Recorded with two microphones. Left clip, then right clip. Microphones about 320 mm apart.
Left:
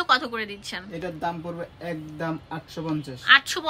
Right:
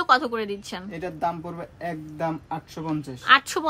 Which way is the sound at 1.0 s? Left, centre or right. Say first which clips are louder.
Right 3 dB; centre.